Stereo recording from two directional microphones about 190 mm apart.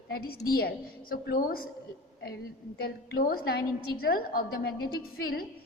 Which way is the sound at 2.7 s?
55° left (ahead or behind).